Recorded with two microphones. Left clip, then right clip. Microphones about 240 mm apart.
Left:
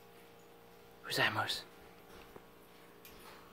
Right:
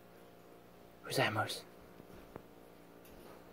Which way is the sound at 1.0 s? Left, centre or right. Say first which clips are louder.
Left 1 dB; centre.